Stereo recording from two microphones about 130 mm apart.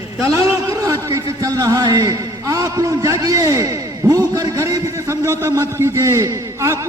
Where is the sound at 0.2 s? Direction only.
20° right (ahead or behind).